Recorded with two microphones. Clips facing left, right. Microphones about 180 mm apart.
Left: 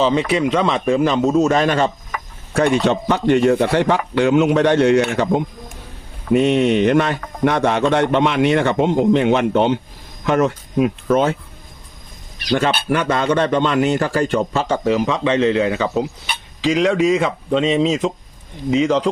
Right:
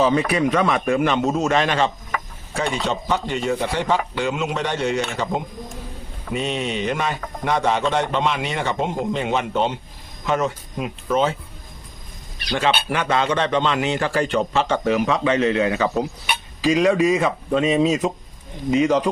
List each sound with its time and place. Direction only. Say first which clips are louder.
0.0 s a man's voice: left 2 dB; 25° left (ahead or behind); by 1.9 s 45° left (ahead or behind)
2.5 s speech: left 8 dB; 55° left (ahead or behind)
6.3 s speech: left 10 dB; 60° left (ahead or behind)
12.5 s a man's voice: left 3 dB; 50° left (ahead or behind); by 19.0 s 25° left (ahead or behind)